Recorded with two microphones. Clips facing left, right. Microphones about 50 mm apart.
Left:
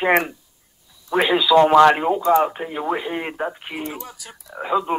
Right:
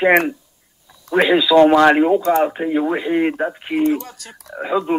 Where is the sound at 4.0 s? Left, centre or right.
Centre.